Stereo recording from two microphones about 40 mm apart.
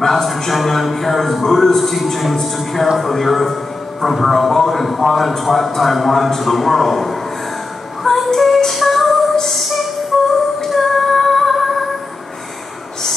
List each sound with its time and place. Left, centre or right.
0.0 s a man's voice: centre
8.0 s music: centre
9.4 s a sound: centre
10.1 s humming: centre
10.6 s music: centre